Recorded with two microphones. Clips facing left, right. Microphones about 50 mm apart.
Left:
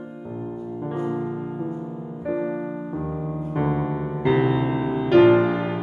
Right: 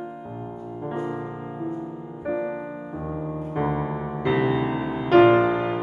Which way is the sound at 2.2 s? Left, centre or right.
Centre.